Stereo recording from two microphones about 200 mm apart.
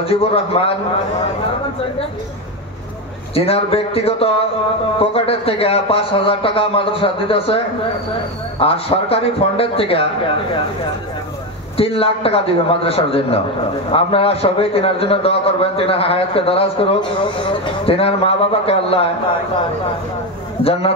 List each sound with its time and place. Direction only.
0.0 s a man's voice: 30° left (ahead or behind)
3.3 s a man's voice: 30° left (ahead or behind)
11.7 s a man's voice: 30° left (ahead or behind)